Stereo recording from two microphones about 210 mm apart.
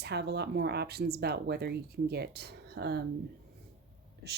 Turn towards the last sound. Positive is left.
turn(degrees=-50)  # may be behind; listen again after turning